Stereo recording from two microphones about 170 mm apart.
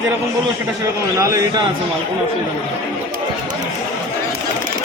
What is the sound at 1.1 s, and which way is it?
Speech, 20° right (ahead or behind).